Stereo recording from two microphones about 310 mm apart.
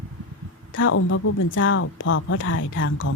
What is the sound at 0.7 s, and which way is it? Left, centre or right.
Speech, left.